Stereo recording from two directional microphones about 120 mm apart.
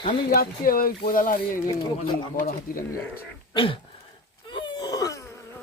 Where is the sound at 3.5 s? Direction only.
45° left (ahead or behind).